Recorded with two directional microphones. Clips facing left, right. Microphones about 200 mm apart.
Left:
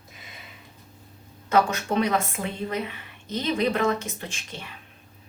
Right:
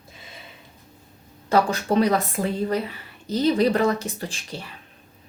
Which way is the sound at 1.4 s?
35° right (ahead or behind).